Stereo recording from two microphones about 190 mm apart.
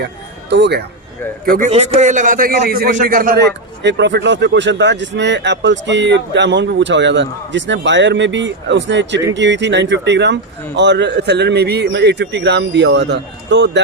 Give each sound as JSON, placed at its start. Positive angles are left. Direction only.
{"t": 0.5, "sound": "speech", "side_deg": -60}
{"t": 1.5, "sound": "a man's voice", "side_deg": -45}